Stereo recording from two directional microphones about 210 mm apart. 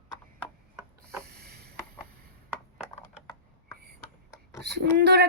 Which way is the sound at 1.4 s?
50° right (ahead or behind).